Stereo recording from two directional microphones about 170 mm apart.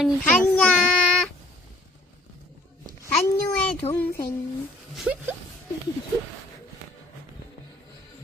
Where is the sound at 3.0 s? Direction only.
5° left (ahead or behind).